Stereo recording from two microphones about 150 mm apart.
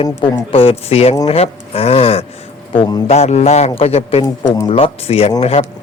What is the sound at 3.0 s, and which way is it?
A man's voice, 45° left (ahead or behind).